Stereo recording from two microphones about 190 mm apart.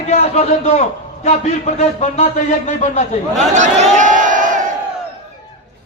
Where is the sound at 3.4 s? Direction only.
40° right (ahead or behind).